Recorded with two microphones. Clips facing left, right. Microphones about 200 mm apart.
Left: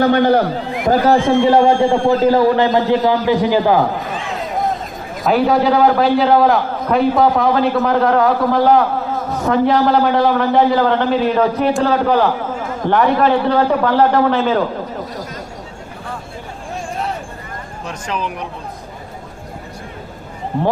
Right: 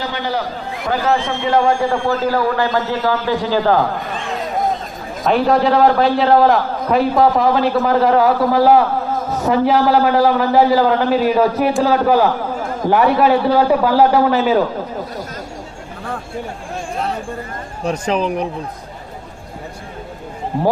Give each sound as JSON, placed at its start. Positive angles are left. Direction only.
{"t": 0.0, "sound": "a man's voice", "side_deg": 55}
{"t": 1.5, "sound": "a man's voice", "side_deg": 25}
{"t": 4.0, "sound": "a sound", "side_deg": 0}
{"t": 5.2, "sound": "a man's voice", "side_deg": 0}
{"t": 17.8, "sound": "speech", "side_deg": -35}